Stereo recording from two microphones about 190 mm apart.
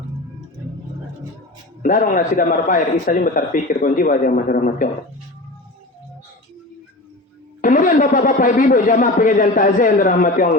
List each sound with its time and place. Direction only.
1.8 s a man's voice: 45° left (ahead or behind)
7.6 s a man's voice: 45° left (ahead or behind)